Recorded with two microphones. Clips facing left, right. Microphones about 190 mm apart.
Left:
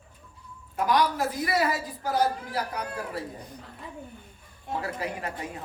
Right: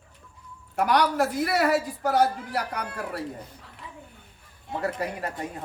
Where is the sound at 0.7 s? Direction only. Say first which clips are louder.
Right 2 dB; 70° right (ahead or behind).